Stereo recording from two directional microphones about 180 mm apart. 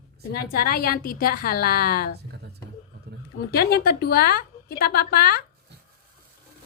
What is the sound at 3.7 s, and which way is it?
A woman's voice, 60° left (ahead or behind).